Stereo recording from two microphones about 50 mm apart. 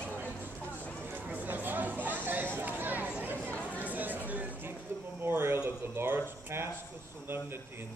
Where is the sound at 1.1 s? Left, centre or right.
Right.